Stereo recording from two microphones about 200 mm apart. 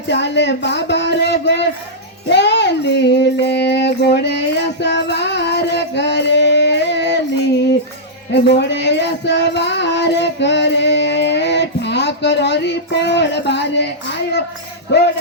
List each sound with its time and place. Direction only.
0.1 s speech: 60° left (ahead or behind)
2.3 s child singing: 60° left (ahead or behind)
8.4 s music: 60° left (ahead or behind)